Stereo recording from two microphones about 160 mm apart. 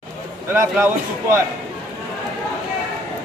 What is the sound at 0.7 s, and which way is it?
Speech, 15° right (ahead or behind).